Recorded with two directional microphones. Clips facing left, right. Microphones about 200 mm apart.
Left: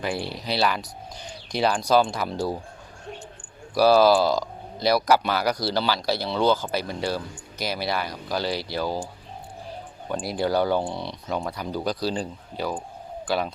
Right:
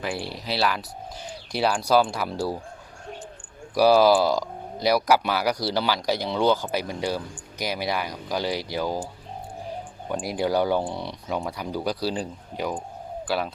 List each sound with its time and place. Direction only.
0.0 s speech: centre (ahead or behind)
3.8 s speech: 15° right (ahead or behind)
10.1 s speech: 10° right (ahead or behind)